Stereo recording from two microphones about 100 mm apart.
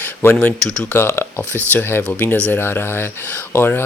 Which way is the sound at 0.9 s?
25° left (ahead or behind).